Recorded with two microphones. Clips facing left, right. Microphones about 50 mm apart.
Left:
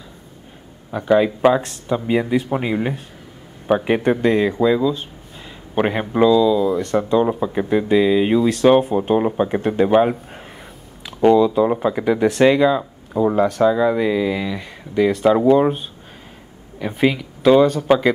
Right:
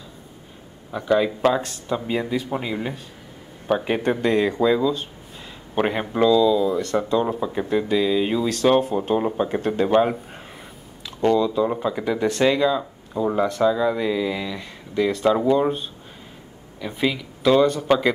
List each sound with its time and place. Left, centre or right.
0.9 s speech: centre
7.1 s speech: centre
17.2 s speech: centre